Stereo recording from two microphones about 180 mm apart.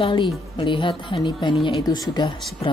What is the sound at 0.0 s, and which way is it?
A woman's voice, 30° left (ahead or behind).